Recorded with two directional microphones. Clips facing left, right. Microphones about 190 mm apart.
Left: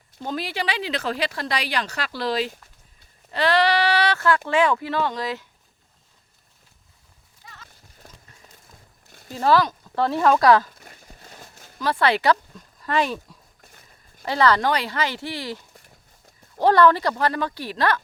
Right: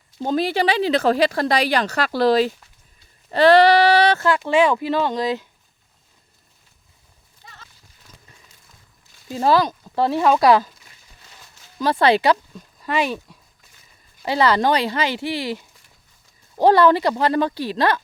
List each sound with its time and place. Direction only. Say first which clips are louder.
0.3 s speech: right 9 dB; 30° right (ahead or behind)
7.7 s horse: left 3 dB; 55° left (ahead or behind)
9.0 s a sound: left 7 dB; 60° left (ahead or behind)
9.3 s speech: right 2 dB; 15° right (ahead or behind)
10.8 s a sound: left 7 dB; 55° left (ahead or behind)
12.8 s speech: right 1 dB; 5° right (ahead or behind)
13.6 s a sound: left 4 dB; 55° left (ahead or behind)
14.3 s speech: right 1 dB; 10° right (ahead or behind)
14.8 s speech: right 4 dB; 25° right (ahead or behind)
15.7 s a sound: left 6 dB; 55° left (ahead or behind)
16.6 s speech: right 3 dB; 10° right (ahead or behind)
16.8 s speech: right 2 dB; 25° right (ahead or behind)